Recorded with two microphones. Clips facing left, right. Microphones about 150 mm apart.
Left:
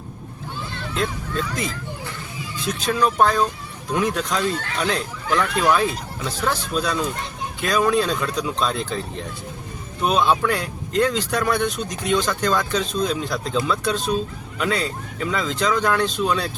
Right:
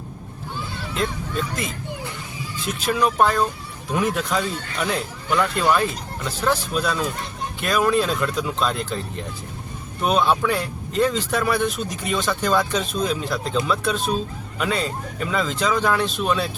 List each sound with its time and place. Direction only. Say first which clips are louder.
0.9 s speech: even; centre (ahead or behind)
15.2 s speech: even; 5° right (ahead or behind)